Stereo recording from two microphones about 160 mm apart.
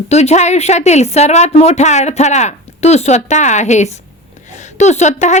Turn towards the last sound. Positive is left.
turn(degrees=45)  # may be behind; listen again after turning